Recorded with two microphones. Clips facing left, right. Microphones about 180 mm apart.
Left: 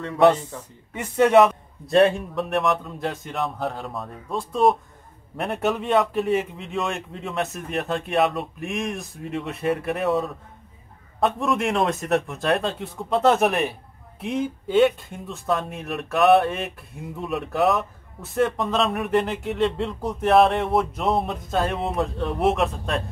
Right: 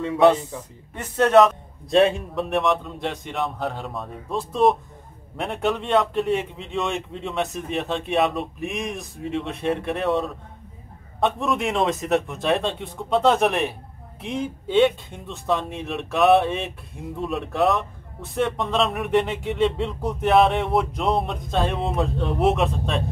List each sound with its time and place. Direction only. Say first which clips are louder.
0.0 s speech: right 1 dB; 5° right (ahead or behind)
0.9 s speech: even; 10° left (ahead or behind)